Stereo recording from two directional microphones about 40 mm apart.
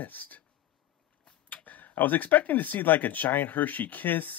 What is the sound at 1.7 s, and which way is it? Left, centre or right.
Speech, left.